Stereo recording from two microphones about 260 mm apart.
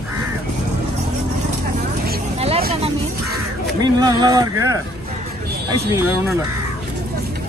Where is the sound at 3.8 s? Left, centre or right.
Centre.